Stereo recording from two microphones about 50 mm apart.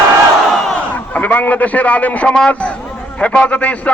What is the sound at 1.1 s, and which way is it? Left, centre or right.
A man's voice, left.